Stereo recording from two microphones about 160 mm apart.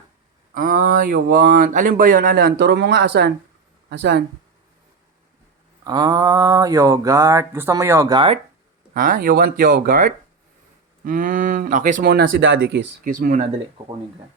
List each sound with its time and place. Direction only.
0.5 s speech: 60° right (ahead or behind); by 4.2 s 90° right
5.8 s a sound: 25° right (ahead or behind)
8.9 s speech: 60° right (ahead or behind)
13.1 s speech: 55° right (ahead or behind)